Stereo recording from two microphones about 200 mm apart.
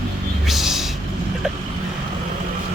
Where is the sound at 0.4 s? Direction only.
Centre (ahead or behind).